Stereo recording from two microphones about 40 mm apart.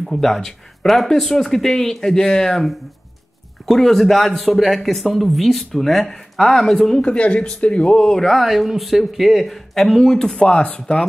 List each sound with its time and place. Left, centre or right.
0.0 s speech: centre
3.6 s speech: centre
7.1 s speech: left; by 10.2 s centre
10.2 s speech: centre